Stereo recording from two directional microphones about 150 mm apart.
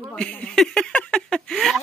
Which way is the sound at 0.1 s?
5° left (ahead or behind).